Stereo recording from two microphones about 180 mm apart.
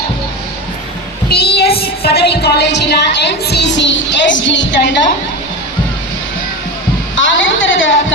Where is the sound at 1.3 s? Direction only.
60° left (ahead or behind); by 5.0 s 80° left.